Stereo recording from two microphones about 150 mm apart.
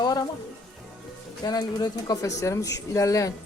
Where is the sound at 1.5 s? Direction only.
25° left (ahead or behind).